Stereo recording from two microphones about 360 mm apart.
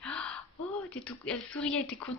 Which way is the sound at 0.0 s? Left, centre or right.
Centre.